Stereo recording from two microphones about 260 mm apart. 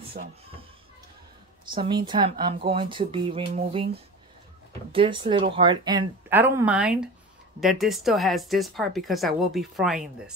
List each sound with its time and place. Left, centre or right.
1.7 s speech: centre